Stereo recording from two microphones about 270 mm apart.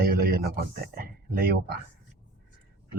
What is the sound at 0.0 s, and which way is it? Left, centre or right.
Speech, right.